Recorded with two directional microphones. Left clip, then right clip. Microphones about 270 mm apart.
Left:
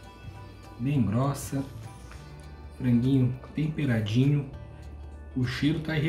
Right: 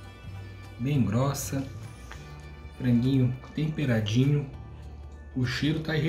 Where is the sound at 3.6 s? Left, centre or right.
Centre.